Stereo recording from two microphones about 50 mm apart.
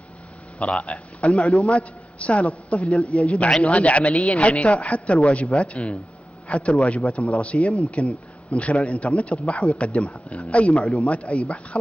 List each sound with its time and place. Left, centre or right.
0.6 s a man's voice: left
1.4 s a man's voice: centre